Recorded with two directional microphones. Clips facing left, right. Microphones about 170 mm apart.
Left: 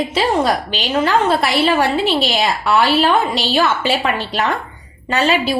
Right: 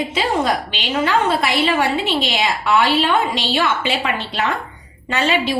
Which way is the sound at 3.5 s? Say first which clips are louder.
Left 4 dB; 40° left (ahead or behind).